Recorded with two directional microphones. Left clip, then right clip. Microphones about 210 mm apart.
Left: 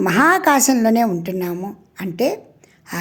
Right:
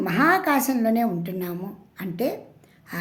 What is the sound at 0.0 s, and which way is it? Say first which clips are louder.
A woman's voice: left 6 dB; 35° left (ahead or behind).